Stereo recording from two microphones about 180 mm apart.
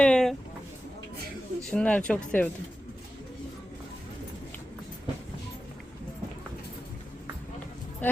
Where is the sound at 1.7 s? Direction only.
5° left (ahead or behind).